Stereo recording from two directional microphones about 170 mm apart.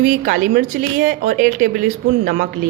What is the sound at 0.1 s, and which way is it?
A woman's voice, 55° right (ahead or behind).